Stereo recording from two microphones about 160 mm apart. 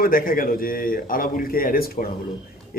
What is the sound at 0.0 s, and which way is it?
A man's voice, 65° left (ahead or behind).